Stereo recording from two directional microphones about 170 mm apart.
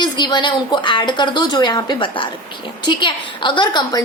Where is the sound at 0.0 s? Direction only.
25° left (ahead or behind).